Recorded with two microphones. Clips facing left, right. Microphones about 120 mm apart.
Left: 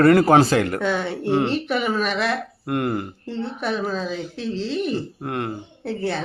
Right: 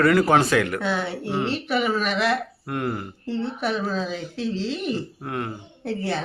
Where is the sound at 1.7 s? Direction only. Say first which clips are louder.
Left 1 dB; centre (ahead or behind).